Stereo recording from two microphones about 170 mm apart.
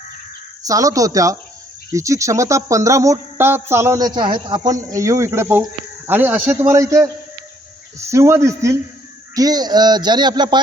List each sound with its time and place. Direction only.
0.6 s speech: 20° right (ahead or behind)